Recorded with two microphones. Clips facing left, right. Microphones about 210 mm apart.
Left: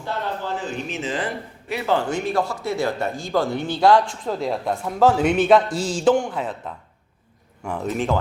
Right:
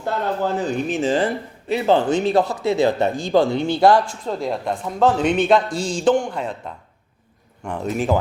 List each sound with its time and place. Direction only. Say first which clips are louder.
0.0 s a man's voice: right 5 dB; 40° right (ahead or behind); by 4.0 s 10° right (ahead or behind)
4.3 s a man's voice: even; centre (ahead or behind)
7.7 s a man's voice: right 1 dB; centre (ahead or behind)